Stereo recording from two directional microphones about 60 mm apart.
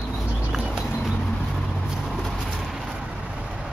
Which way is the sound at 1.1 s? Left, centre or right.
Centre.